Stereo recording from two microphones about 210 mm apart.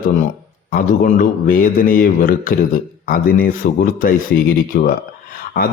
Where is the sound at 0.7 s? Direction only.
40° left (ahead or behind).